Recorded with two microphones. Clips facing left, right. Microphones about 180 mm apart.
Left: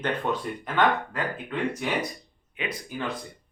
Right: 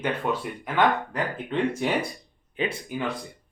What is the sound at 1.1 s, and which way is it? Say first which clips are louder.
Speech: right 3 dB; 25° right (ahead or behind).